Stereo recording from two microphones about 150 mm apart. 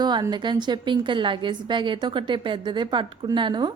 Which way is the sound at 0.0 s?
30° right (ahead or behind).